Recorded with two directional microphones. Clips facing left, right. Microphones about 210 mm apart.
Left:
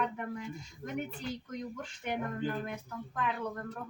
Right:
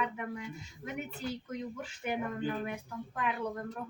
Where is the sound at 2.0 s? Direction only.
10° right (ahead or behind).